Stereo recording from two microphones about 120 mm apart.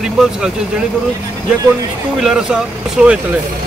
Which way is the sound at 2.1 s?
5° right (ahead or behind).